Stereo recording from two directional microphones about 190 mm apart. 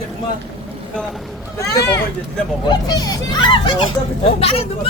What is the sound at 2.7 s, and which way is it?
A child's voice, 20° left (ahead or behind).